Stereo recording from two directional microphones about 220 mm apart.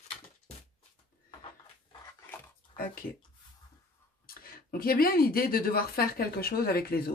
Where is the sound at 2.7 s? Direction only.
40° left (ahead or behind).